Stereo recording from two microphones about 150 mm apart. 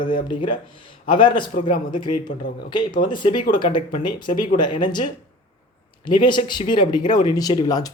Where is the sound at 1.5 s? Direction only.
60° left (ahead or behind).